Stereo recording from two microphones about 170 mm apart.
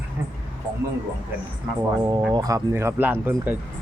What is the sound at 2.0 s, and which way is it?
A man's voice, 25° right (ahead or behind).